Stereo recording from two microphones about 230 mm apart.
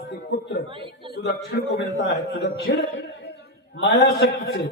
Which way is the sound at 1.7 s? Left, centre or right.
Left.